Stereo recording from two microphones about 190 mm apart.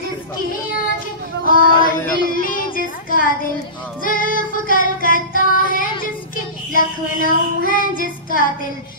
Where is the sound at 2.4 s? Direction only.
45° left (ahead or behind).